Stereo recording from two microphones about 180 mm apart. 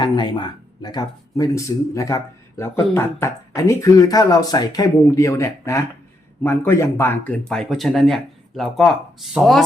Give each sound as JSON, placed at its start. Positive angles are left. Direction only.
{"t": 0.0, "sound": "speech", "side_deg": 25}